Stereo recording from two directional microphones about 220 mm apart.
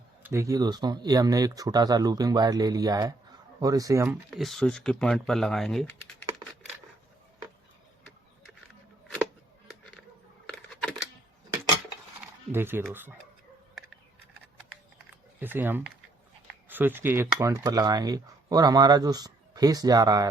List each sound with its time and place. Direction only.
0.2 s cutlery: 10° right (ahead or behind)
4.3 s speech: centre (ahead or behind)
10.5 s typing: 5° left (ahead or behind)
12.5 s speech: 10° right (ahead or behind)
12.9 s cutlery: 10° right (ahead or behind)
15.4 s cutlery: 10° right (ahead or behind)